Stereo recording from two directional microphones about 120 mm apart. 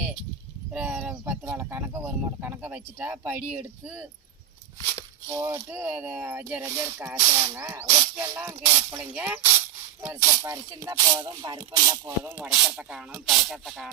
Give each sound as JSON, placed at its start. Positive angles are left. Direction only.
{"t": 0.7, "sound": "a sound", "side_deg": -10}
{"t": 1.2, "sound": "speech", "side_deg": -15}
{"t": 5.3, "sound": "speech", "side_deg": -25}
{"t": 9.1, "sound": "speech", "side_deg": -10}
{"t": 12.2, "sound": "speech", "side_deg": -15}
{"t": 12.5, "sound": "rub", "side_deg": -5}